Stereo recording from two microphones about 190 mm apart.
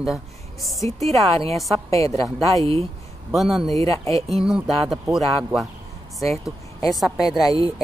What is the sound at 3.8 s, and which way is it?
Speech, 15° left (ahead or behind).